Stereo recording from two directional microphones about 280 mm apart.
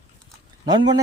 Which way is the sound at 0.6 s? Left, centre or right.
Centre.